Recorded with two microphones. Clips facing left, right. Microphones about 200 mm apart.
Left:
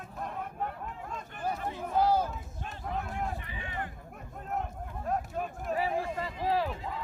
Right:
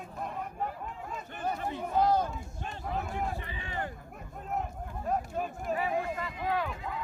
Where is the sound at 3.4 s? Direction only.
30° right (ahead or behind).